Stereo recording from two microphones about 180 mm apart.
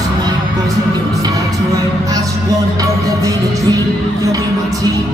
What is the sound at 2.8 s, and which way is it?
Music, 20° right (ahead or behind).